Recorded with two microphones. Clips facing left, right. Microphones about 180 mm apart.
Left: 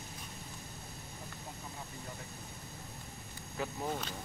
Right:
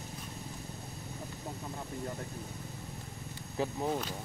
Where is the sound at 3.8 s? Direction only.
5° right (ahead or behind).